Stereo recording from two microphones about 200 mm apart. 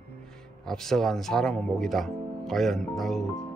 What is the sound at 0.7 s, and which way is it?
Speech, centre (ahead or behind).